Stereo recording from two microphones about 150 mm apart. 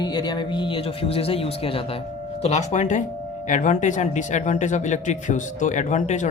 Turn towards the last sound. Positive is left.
turn(degrees=55)  # may be behind; listen again after turning